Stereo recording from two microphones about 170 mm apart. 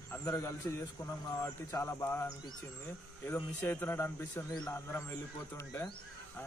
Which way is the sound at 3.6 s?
15° left (ahead or behind).